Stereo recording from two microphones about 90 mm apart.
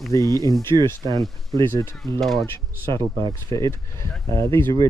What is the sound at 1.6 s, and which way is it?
Speech, 50° right (ahead or behind).